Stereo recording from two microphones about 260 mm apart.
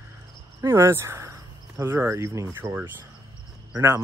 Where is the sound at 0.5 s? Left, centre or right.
Centre.